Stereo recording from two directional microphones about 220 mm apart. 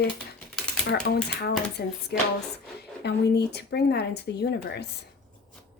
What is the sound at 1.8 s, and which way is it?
Speech, 50° left (ahead or behind).